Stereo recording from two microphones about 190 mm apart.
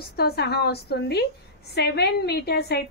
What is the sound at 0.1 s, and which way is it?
A woman's voice, 55° left (ahead or behind).